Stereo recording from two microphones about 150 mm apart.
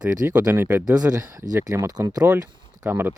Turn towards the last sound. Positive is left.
turn(degrees=-15)  # may be behind; listen again after turning